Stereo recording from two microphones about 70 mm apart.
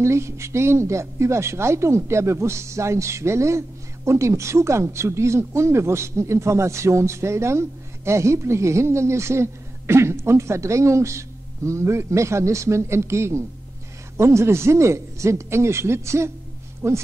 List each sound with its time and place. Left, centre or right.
0.0 s speech: right